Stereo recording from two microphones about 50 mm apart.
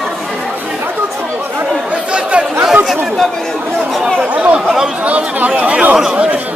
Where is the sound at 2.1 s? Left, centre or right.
Centre.